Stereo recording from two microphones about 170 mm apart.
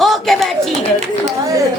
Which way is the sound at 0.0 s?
Centre (ahead or behind).